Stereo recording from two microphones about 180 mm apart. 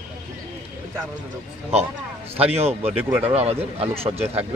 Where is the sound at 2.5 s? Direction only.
35° right (ahead or behind).